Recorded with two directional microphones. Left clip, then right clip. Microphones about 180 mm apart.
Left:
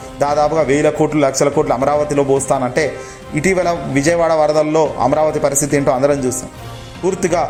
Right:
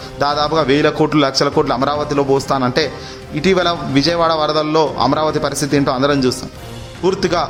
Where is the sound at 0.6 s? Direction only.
25° right (ahead or behind).